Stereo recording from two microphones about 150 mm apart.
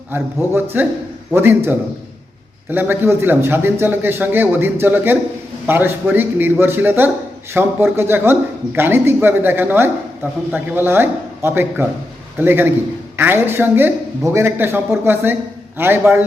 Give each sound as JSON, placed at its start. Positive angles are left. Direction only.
{"t": 0.1, "sound": "a man's voice", "side_deg": -15}